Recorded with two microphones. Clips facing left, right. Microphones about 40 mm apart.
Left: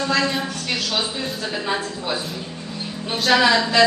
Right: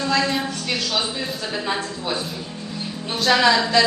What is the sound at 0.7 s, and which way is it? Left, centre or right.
Speech, left.